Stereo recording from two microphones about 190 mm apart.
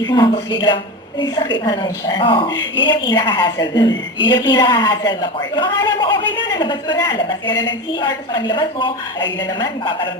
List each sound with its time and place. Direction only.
0.0 s a woman's voice: 20° left (ahead or behind)